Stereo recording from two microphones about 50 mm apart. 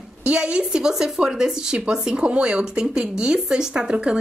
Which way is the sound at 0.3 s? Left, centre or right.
Centre.